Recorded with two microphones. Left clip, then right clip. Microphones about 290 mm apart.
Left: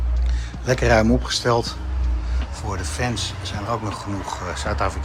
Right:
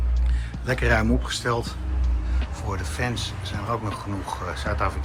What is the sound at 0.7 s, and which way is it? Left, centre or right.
Speech, centre.